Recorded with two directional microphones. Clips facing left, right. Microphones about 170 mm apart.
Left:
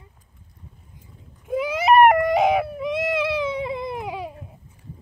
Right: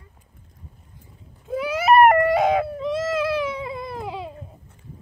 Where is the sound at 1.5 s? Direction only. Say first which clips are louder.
Even; 15° left (ahead or behind).